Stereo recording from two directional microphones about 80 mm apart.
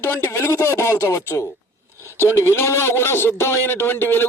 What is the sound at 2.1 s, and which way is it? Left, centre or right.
A man's voice, left.